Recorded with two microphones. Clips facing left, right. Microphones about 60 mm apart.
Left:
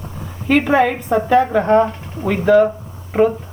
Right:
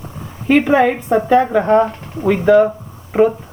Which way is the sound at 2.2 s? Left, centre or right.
Centre.